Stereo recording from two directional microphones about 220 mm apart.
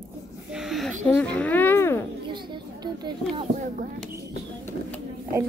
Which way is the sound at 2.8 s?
20° right (ahead or behind).